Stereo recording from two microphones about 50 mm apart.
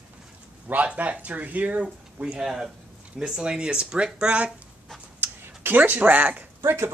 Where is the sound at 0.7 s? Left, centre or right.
Right.